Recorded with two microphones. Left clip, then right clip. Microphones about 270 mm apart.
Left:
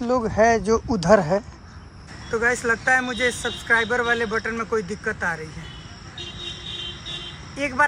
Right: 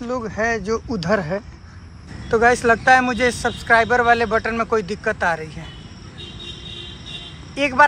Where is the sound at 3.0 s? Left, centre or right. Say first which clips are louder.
Right 4 dB; centre.